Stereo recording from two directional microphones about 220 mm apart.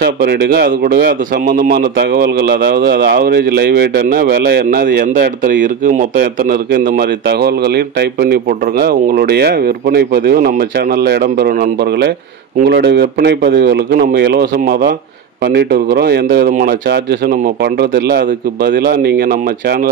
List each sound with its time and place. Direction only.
0.0 s speech: 45° right (ahead or behind)